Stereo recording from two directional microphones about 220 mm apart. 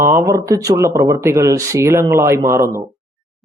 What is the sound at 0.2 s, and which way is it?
Speech, 15° right (ahead or behind).